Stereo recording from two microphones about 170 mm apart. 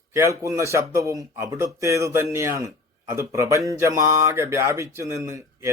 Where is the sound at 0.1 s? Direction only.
20° right (ahead or behind).